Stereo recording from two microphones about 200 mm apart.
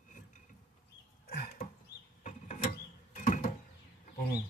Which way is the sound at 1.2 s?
50° left (ahead or behind).